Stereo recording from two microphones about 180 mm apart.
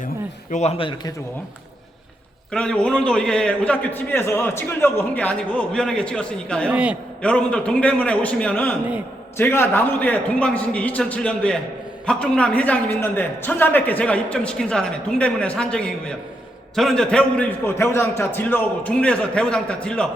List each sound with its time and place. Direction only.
0.5 s a man's voice: 35° left (ahead or behind)
2.5 s a man's voice: 5° left (ahead or behind)
6.7 s a man's voice: 10° right (ahead or behind)
7.2 s a man's voice: 5° left (ahead or behind)